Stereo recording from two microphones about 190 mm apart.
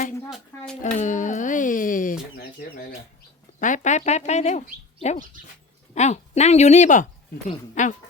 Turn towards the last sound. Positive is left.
turn(degrees=40)  # may be behind; listen again after turning